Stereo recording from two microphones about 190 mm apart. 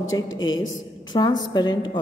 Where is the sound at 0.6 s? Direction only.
20° left (ahead or behind).